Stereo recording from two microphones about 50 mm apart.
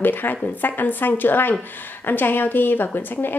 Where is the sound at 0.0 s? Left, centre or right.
Left.